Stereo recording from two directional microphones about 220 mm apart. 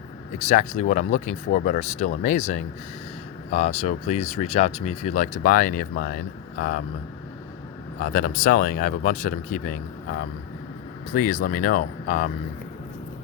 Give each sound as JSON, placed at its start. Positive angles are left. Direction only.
{"t": 0.4, "sound": "speech", "side_deg": 30}
{"t": 7.9, "sound": "speech", "side_deg": 35}